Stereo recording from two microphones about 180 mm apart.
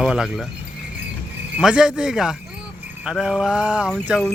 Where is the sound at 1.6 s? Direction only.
5° right (ahead or behind).